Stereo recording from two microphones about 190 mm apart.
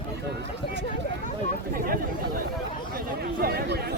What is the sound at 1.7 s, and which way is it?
Speech, 50° right (ahead or behind).